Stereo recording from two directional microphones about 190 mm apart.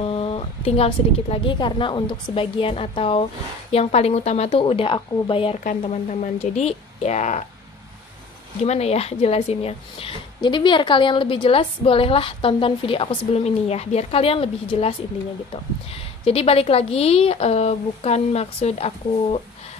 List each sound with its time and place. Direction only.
0.0 s a woman's voice: 30° left (ahead or behind)
5.6 s speech: 40° left (ahead or behind)
8.6 s a woman's voice: 35° left (ahead or behind)